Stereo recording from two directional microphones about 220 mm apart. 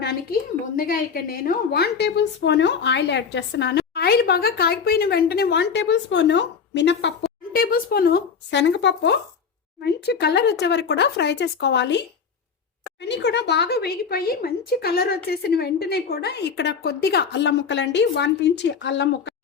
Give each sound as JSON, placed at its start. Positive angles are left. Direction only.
{"t": 0.0, "sound": "a sound", "side_deg": 45}
{"t": 0.8, "sound": "speech", "side_deg": 40}
{"t": 7.5, "sound": "speech", "side_deg": 40}